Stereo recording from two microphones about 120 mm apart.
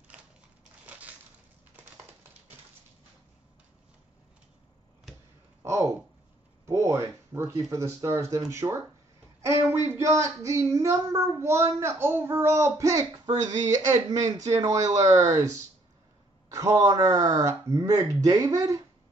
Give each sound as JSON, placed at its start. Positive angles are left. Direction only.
{"t": 0.8, "sound": "crushing", "side_deg": -15}
{"t": 5.6, "sound": "a sound", "side_deg": -25}
{"t": 7.7, "sound": "speech", "side_deg": -25}
{"t": 9.4, "sound": "a sound", "side_deg": -20}
{"t": 9.8, "sound": "speech", "side_deg": -25}
{"t": 14.1, "sound": "speech", "side_deg": -30}